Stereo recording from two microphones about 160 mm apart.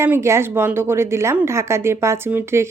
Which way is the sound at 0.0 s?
15° right (ahead or behind).